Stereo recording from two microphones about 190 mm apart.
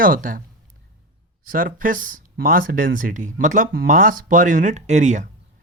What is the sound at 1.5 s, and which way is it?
Speech, 45° right (ahead or behind).